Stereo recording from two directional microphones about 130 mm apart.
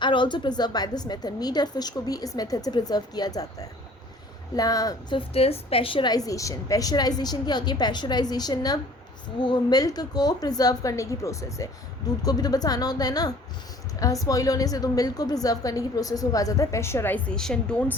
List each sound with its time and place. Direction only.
0.0 s a woman's voice: 35° left (ahead or behind)
5.1 s a woman's voice: 50° left (ahead or behind); by 17.8 s 5° left (ahead or behind)